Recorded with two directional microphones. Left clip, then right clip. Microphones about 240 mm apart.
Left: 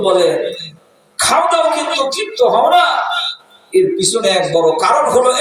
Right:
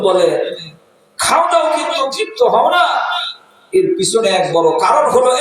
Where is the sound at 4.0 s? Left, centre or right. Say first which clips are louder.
Even; left.